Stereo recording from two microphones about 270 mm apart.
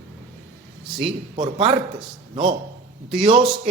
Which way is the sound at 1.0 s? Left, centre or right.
Centre.